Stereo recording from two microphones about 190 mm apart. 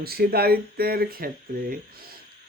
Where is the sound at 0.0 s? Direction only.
55° right (ahead or behind).